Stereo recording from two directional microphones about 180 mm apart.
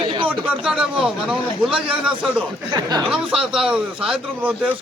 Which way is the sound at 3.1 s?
5° right (ahead or behind).